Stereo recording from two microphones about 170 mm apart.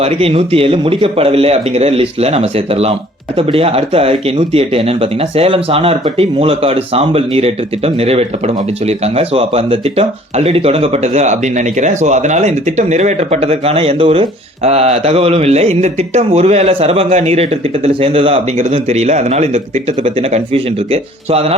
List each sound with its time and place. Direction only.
0.0 s speech: 35° right (ahead or behind)